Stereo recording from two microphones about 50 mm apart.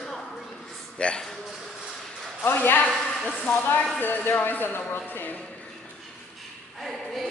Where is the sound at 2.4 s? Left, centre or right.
Left.